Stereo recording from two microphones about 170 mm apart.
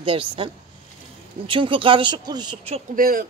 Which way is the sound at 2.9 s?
60° right (ahead or behind).